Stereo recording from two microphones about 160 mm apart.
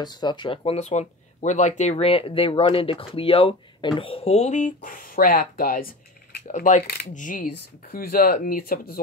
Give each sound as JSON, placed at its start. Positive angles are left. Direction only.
{"t": 0.0, "sound": "speech", "side_deg": 25}
{"t": 4.8, "sound": "speech", "side_deg": 60}
{"t": 6.4, "sound": "speech", "side_deg": 50}